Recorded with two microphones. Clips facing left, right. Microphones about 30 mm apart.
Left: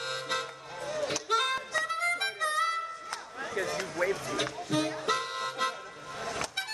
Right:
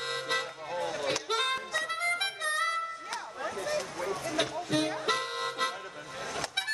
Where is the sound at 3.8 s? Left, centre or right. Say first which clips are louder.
Left 3 dB; left.